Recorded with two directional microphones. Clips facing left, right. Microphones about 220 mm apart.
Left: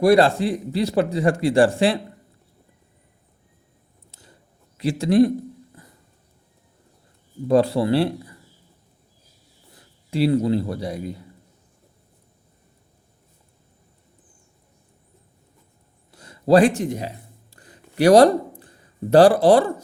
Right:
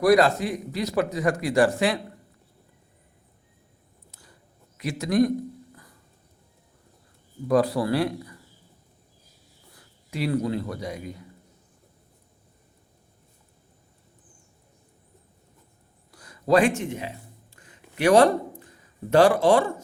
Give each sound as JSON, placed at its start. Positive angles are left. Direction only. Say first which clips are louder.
{"t": 0.0, "sound": "a man's voice", "louder": "left 3 dB", "side_deg": 30}
{"t": 4.8, "sound": "speech", "louder": "left 5 dB", "side_deg": 30}
{"t": 7.4, "sound": "a man's voice", "louder": "left 4 dB", "side_deg": 25}
{"t": 9.7, "sound": "speech", "louder": "left 8 dB", "side_deg": 30}
{"t": 16.1, "sound": "speech", "louder": "left 5 dB", "side_deg": 25}
{"t": 17.5, "sound": "a sound", "louder": "left 4 dB", "side_deg": 35}
{"t": 19.1, "sound": "speech", "louder": "left 5 dB", "side_deg": 35}